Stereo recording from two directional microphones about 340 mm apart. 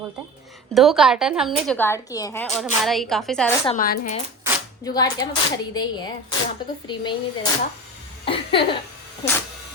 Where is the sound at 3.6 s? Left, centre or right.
Left.